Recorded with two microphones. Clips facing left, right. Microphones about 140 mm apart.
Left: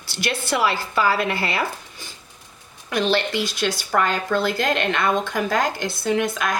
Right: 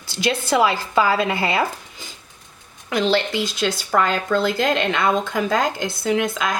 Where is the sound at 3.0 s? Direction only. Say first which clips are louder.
Right 1 dB; 25° right (ahead or behind).